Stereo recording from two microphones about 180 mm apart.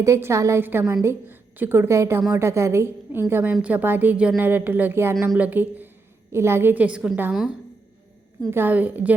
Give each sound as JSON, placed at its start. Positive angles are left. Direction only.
{"t": 0.0, "sound": "a woman's voice", "side_deg": -15}